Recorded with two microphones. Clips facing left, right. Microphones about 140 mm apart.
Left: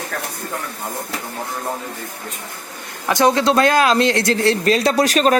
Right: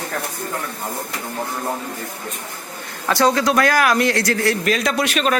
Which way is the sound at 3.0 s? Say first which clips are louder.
Left 2 dB; 20° left (ahead or behind).